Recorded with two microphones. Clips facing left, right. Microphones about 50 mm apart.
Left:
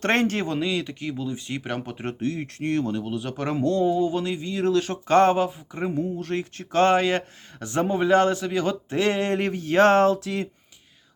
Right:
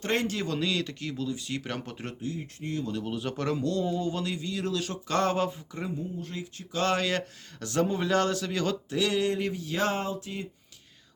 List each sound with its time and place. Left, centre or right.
0.0 s speech: left
0.4 s speech: left
2.2 s speech: left
3.0 s speech: centre
3.4 s a man's voice: left
3.9 s speech: centre; by 5.4 s left
5.9 s speech: left
6.8 s a man's voice: left